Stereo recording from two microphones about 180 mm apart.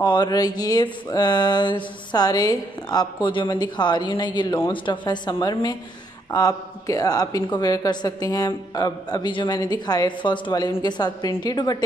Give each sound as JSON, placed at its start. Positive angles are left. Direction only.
{"t": 0.0, "sound": "a woman's voice", "side_deg": 25}